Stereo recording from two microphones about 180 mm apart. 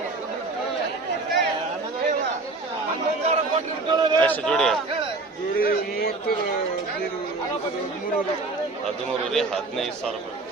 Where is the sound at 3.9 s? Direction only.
25° right (ahead or behind).